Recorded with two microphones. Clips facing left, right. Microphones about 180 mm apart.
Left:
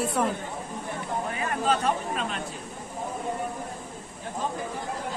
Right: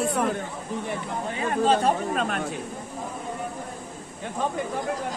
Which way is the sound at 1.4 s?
30° right (ahead or behind).